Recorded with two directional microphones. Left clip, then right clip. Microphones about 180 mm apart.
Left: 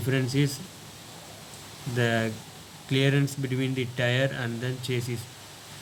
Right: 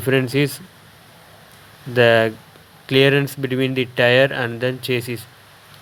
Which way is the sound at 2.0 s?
40° right (ahead or behind).